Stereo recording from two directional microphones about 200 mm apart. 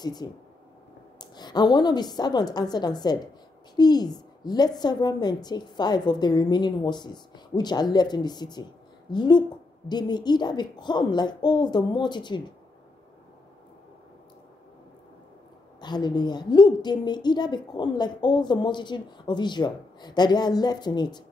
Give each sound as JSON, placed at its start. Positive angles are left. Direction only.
{"t": 0.0, "sound": "a woman's voice", "side_deg": 20}
{"t": 1.3, "sound": "a woman's voice", "side_deg": 20}
{"t": 15.8, "sound": "a woman's voice", "side_deg": 20}